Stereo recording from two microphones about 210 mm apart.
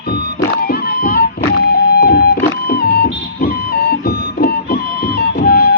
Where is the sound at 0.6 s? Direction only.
45° left (ahead or behind).